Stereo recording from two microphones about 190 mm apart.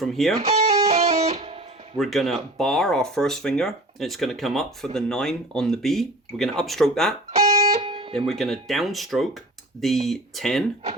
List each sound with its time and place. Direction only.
0.0 s speech: centre (ahead or behind)
0.4 s music: 35° right (ahead or behind)
2.0 s speech: centre (ahead or behind)
7.7 s guitar: 30° right (ahead or behind)
8.3 s speech: centre (ahead or behind)